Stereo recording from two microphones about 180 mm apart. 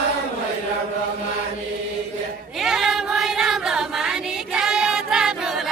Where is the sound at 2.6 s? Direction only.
5° right (ahead or behind).